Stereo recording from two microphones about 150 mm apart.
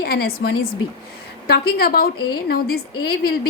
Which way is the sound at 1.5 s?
90° left.